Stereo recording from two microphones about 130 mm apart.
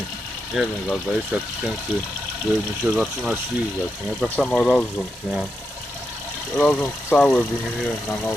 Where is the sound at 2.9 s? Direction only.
5° right (ahead or behind).